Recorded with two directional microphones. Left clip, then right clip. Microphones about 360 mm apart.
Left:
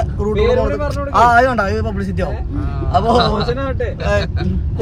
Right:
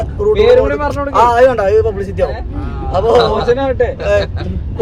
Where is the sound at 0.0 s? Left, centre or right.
Centre.